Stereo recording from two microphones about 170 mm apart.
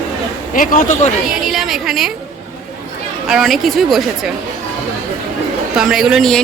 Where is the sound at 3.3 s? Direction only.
Centre (ahead or behind).